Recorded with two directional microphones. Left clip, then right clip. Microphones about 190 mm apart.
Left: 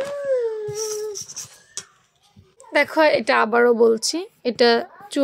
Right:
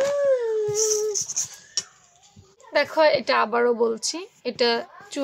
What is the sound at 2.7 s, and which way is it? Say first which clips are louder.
A woman's voice: left 2 dB; 35° left (ahead or behind).